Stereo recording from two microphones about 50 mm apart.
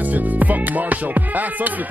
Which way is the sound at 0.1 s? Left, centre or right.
Right.